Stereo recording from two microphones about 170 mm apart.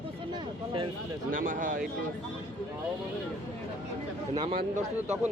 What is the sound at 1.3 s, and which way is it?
Speech, 55° right (ahead or behind).